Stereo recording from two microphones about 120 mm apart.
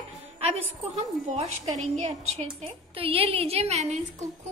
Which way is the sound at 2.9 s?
50° right (ahead or behind).